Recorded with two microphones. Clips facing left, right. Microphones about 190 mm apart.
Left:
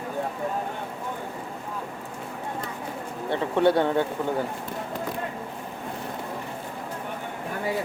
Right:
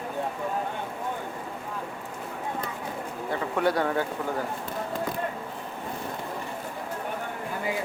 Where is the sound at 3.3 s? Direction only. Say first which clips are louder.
Left 5 dB; 25° left (ahead or behind).